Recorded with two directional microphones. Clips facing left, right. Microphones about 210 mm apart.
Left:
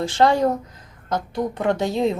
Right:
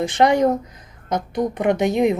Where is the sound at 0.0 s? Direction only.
20° right (ahead or behind).